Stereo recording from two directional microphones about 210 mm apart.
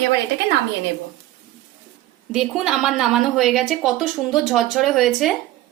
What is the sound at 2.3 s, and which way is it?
A woman's voice, centre (ahead or behind).